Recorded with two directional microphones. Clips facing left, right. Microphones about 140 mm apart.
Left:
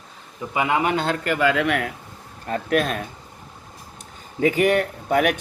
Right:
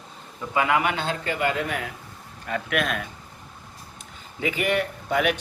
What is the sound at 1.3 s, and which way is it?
Speech, 85° left.